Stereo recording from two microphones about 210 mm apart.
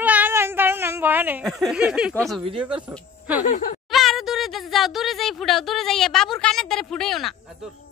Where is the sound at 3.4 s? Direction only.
40° left (ahead or behind).